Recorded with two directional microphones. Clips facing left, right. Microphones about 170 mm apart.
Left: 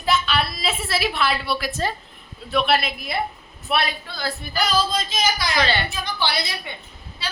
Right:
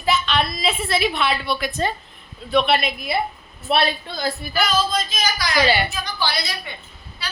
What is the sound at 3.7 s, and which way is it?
Speech, 30° right (ahead or behind).